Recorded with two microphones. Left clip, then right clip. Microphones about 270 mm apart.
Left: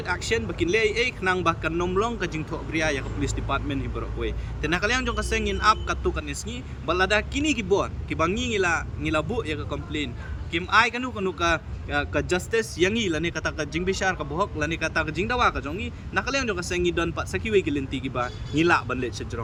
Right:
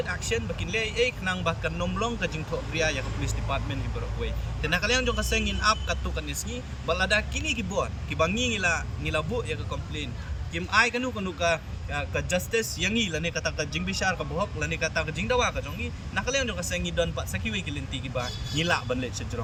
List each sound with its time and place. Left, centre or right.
0.0 s a man's voice: centre